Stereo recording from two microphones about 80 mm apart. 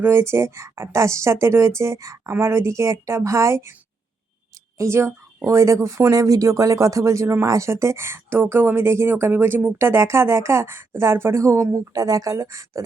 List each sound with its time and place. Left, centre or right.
0.0 s a woman's voice: right
2.3 s a woman's voice: right
4.8 s a woman's voice: right
9.7 s a woman's voice: right